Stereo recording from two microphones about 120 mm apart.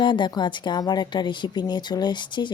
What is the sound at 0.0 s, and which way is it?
A woman's voice, 40° left (ahead or behind).